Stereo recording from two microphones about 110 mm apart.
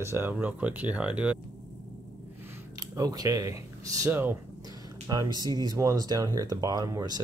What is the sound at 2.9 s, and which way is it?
Speech, 35° right (ahead or behind).